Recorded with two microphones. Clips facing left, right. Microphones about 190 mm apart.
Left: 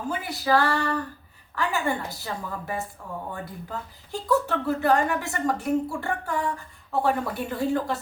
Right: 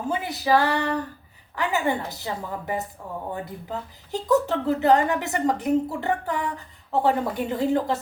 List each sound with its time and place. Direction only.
0.1 s speech: 20° right (ahead or behind)